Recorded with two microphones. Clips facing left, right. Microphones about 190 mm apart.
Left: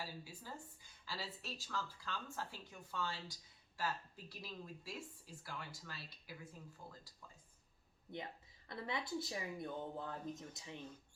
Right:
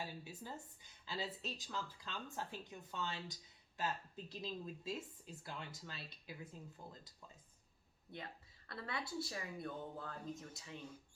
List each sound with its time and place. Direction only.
0.0 s a sound: 20° right (ahead or behind)
1.0 s speech: 20° right (ahead or behind)
8.1 s speech: 20° left (ahead or behind)